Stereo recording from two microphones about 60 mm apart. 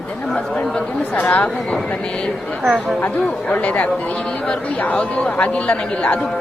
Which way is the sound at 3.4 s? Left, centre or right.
Left.